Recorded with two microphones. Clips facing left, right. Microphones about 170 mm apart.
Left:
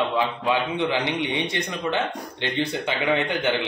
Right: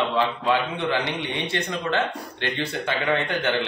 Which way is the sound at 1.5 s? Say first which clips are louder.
Right 1 dB; 15° left (ahead or behind).